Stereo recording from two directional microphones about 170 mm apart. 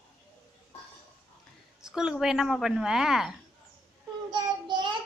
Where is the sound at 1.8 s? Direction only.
5° right (ahead or behind).